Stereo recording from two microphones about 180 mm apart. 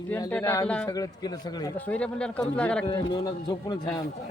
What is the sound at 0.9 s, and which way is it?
Speech, 20° left (ahead or behind).